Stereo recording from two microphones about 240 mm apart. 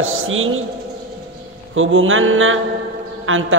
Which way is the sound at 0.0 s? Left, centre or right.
Right.